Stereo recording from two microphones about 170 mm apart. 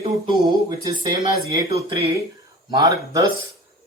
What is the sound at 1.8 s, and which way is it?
Speech, 25° right (ahead or behind).